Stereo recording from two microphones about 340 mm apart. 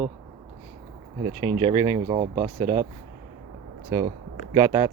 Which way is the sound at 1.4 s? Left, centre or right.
Centre.